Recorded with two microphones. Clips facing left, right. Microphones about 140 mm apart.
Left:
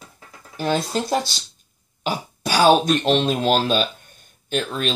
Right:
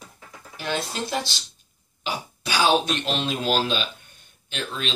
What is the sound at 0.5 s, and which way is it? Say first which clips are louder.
Speech: left 7 dB; 40° left (ahead or behind).